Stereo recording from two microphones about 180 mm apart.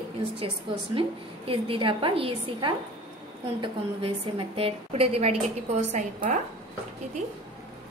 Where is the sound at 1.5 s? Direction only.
30° right (ahead or behind).